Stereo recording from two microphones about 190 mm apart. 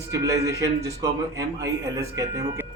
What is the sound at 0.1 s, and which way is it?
A man's voice, 15° right (ahead or behind).